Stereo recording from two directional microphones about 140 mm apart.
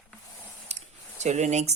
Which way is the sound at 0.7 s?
55° right (ahead or behind).